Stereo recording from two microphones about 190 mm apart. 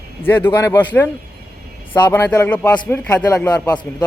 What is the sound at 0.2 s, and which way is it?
A man's voice, 10° left (ahead or behind).